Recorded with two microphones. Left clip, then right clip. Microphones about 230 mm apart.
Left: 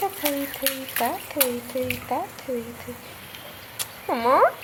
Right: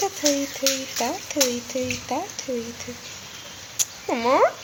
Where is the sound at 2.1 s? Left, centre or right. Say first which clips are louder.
Left 1 dB; centre.